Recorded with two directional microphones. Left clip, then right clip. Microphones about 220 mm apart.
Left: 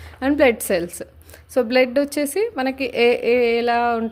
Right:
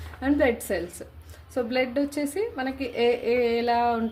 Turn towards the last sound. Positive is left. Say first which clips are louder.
# left 5 dB
turn(degrees=35)  # may be behind; listen again after turning